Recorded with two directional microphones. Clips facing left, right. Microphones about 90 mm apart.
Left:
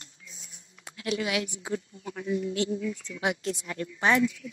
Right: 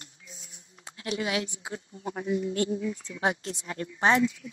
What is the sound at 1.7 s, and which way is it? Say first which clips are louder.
Speech: left 2 dB; 30° right (ahead or behind).